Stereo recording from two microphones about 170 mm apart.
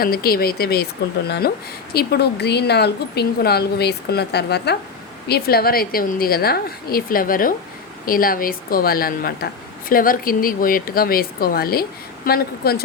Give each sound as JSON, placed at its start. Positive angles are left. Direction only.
{"t": 0.0, "sound": "speech", "side_deg": 60}